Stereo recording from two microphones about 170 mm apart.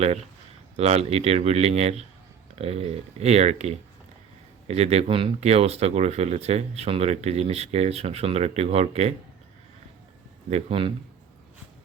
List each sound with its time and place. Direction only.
0.8 s speech: 40° right (ahead or behind)
10.5 s speech: 35° right (ahead or behind)